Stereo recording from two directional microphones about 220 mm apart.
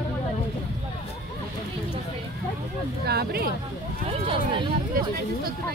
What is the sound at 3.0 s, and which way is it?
Speech, 45° right (ahead or behind).